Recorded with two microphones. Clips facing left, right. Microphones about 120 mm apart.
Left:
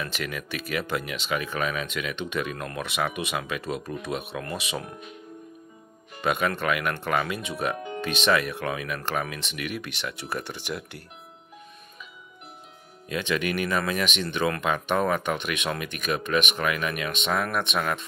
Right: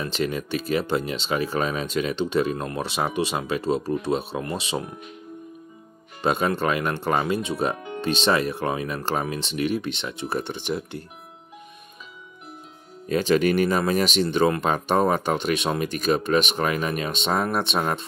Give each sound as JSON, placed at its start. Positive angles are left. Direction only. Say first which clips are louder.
{"t": 0.0, "sound": "speech", "louder": "right 6 dB", "side_deg": -30}
{"t": 6.2, "sound": "speech", "louder": "right 3 dB", "side_deg": -30}
{"t": 13.1, "sound": "speech", "louder": "right 7 dB", "side_deg": -35}